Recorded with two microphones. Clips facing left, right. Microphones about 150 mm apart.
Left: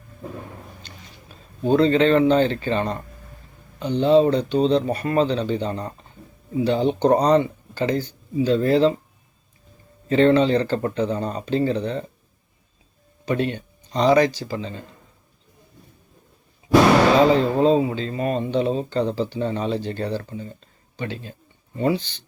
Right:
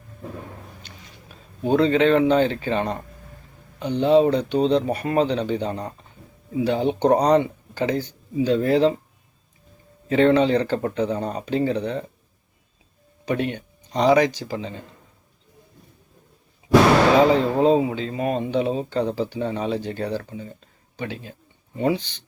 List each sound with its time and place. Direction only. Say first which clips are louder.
1.6 s speech: left 1 dB; 10° right (ahead or behind)
10.1 s speech: left 1 dB; 10° right (ahead or behind)
13.2 s speech: left 1 dB; 15° right (ahead or behind)
17.2 s speech: even; 15° right (ahead or behind)